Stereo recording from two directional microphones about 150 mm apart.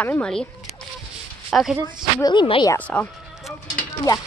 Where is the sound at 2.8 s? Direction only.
10° left (ahead or behind).